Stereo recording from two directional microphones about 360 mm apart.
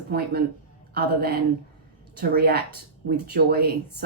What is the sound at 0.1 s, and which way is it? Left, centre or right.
A woman's voice, right.